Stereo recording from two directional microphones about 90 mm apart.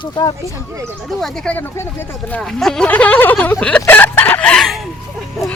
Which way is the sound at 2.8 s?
15° left (ahead or behind).